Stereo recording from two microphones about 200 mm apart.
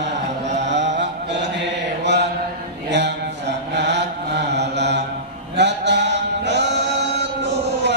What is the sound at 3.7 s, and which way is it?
Mantra, 60° right (ahead or behind).